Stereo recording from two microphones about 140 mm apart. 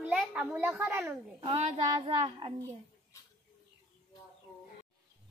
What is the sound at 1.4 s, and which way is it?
Child singing, 50° right (ahead or behind).